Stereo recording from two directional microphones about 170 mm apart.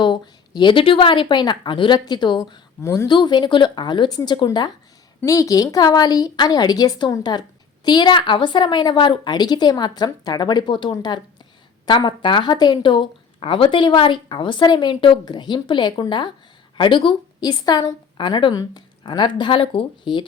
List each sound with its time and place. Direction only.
0.0 s speech: 25° left (ahead or behind)